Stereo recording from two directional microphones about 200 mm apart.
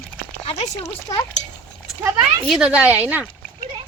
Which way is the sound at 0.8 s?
15° left (ahead or behind).